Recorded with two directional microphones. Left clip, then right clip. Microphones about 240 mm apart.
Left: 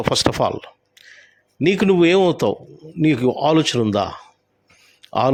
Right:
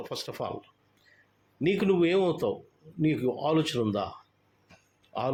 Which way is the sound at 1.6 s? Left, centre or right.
Left.